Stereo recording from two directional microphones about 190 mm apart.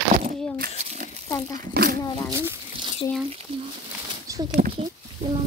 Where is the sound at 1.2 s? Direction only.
15° left (ahead or behind).